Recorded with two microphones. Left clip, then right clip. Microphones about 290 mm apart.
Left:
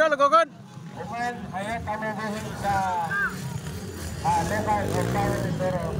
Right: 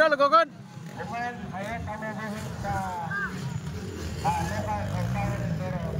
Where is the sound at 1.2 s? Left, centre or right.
Left.